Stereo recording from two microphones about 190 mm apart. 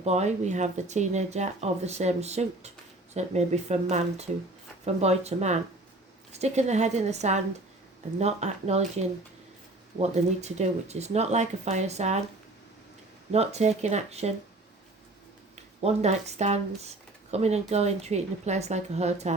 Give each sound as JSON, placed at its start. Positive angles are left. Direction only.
{"t": 0.0, "sound": "speech", "side_deg": -35}
{"t": 13.3, "sound": "speech", "side_deg": -35}
{"t": 15.5, "sound": "speech", "side_deg": -35}